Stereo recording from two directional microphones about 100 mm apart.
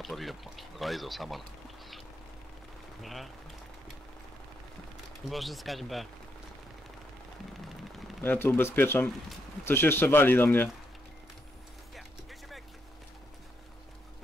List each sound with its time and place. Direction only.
0.0 s speech: centre (ahead or behind)
3.0 s speech: centre (ahead or behind)
5.3 s speech: centre (ahead or behind)
8.2 s speech: 20° left (ahead or behind)
11.9 s a sound: centre (ahead or behind)